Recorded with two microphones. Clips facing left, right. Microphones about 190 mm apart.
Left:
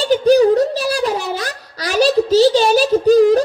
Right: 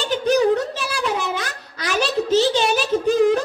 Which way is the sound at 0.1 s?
35° left (ahead or behind).